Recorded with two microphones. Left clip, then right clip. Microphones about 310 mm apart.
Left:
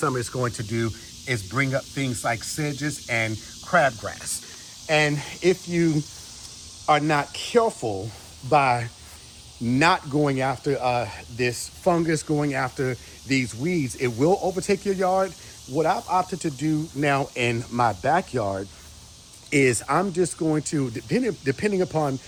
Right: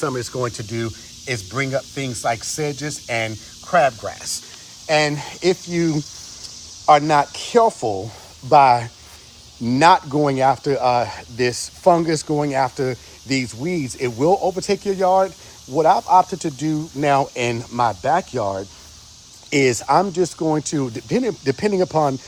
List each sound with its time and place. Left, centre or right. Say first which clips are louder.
0.0 s speech: right 2 dB; centre